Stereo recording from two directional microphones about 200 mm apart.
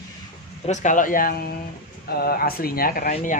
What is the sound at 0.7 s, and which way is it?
Speech, 40° left (ahead or behind).